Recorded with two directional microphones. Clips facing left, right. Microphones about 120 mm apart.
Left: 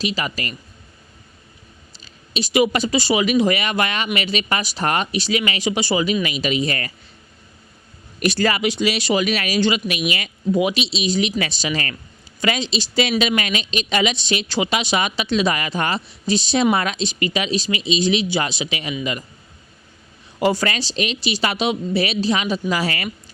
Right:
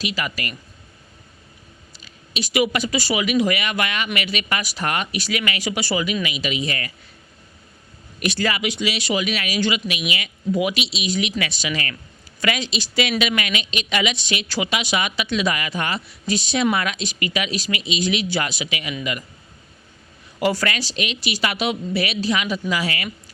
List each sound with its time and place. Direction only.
0.0 s speech: 25° left (ahead or behind)
2.0 s speech: 30° left (ahead or behind)
6.2 s a woman's voice: 40° left (ahead or behind)
8.2 s a woman's voice: 40° left (ahead or behind)
10.5 s a woman's voice: 25° left (ahead or behind)
20.4 s a woman's voice: 25° left (ahead or behind)